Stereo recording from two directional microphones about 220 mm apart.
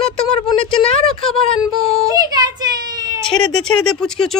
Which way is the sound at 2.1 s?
20° right (ahead or behind).